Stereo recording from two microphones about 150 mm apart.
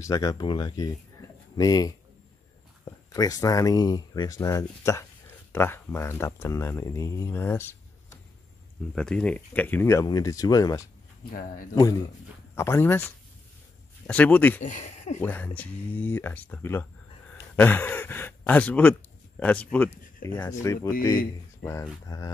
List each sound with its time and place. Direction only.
0.0 s speech: 25° left (ahead or behind)
14.6 s speech: 55° left (ahead or behind)
15.1 s speech: 10° left (ahead or behind)
20.6 s speech: 20° left (ahead or behind)